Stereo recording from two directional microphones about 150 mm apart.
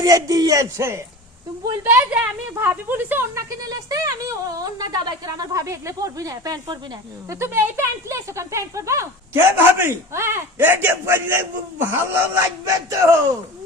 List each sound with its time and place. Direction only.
0.0 s a woman's voice: 25° right (ahead or behind)